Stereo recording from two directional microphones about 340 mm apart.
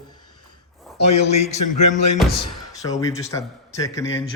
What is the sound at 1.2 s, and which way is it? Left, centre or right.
Speech, centre.